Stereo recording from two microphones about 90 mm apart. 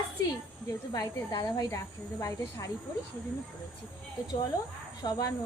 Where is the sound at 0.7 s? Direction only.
45° left (ahead or behind).